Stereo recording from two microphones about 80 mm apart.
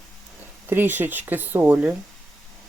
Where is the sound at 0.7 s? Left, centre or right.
Right.